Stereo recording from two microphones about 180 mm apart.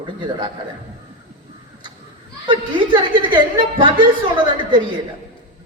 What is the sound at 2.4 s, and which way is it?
A man's voice, 25° right (ahead or behind).